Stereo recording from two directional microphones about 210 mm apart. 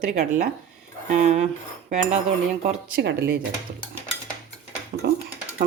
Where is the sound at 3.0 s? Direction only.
50° right (ahead or behind).